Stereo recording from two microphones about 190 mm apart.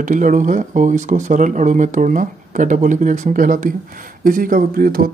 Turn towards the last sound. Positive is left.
turn(degrees=-50)  # may be behind; listen again after turning